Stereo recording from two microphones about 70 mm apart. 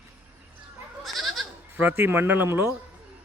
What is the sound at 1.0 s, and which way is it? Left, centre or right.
Goat, centre.